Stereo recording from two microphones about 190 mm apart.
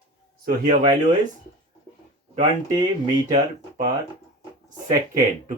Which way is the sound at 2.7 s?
20° right (ahead or behind).